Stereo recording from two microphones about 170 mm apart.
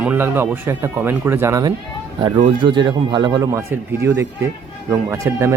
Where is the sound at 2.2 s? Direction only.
30° right (ahead or behind).